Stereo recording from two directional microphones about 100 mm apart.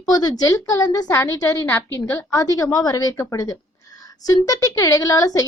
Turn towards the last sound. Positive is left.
turn(degrees=35)  # may be behind; listen again after turning